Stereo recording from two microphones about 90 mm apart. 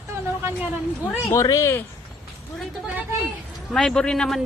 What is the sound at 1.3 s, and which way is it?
Speech, 35° left (ahead or behind).